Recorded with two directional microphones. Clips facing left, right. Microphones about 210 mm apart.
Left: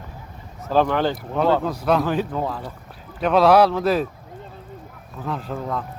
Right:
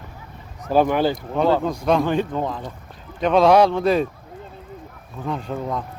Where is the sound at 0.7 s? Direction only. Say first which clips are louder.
Right 2 dB; 10° right (ahead or behind).